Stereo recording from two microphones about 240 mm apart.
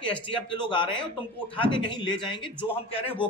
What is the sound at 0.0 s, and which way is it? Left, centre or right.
A man's voice, centre.